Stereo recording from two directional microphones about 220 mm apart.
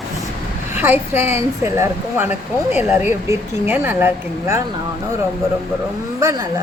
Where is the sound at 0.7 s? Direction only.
10° right (ahead or behind).